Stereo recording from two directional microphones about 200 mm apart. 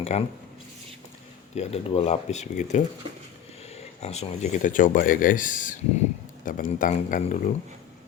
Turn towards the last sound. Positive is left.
turn(degrees=40)  # may be behind; listen again after turning